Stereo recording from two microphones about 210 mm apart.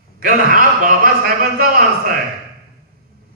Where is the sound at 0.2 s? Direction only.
40° right (ahead or behind).